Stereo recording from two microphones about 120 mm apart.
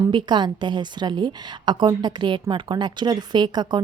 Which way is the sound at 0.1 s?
40° right (ahead or behind).